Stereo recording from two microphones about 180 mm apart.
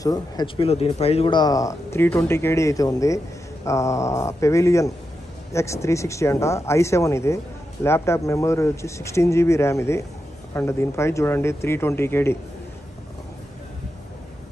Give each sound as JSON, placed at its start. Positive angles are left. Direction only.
{"t": 0.0, "sound": "speech", "side_deg": 20}
{"t": 0.6, "sound": "speech", "side_deg": 35}